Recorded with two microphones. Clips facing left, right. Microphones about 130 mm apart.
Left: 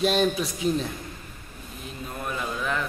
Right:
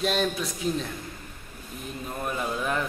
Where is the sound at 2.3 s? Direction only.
20° right (ahead or behind).